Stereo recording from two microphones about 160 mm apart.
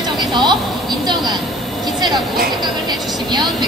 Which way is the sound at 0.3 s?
30° right (ahead or behind).